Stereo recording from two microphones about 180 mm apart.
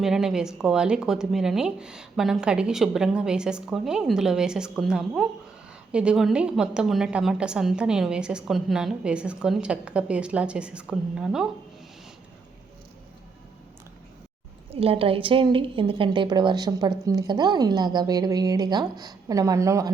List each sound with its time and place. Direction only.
0.0 s a woman's voice: centre (ahead or behind)
14.7 s a woman's voice: 30° right (ahead or behind); by 19.9 s 15° right (ahead or behind)